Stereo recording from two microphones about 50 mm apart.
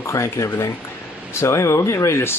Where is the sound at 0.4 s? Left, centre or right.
Left.